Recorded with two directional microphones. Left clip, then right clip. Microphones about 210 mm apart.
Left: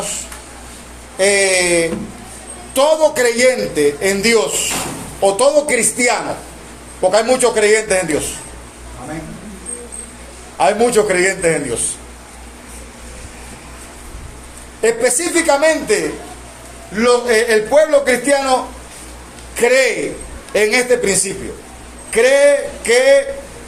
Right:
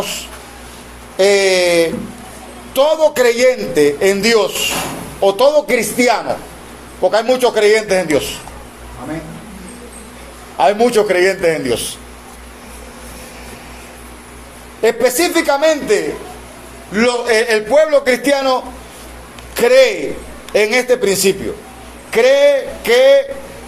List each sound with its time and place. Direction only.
1.1 s a man's voice: 30° right (ahead or behind)
10.6 s a man's voice: 30° right (ahead or behind)
14.8 s a man's voice: 30° right (ahead or behind)
19.5 s a man's voice: 30° right (ahead or behind)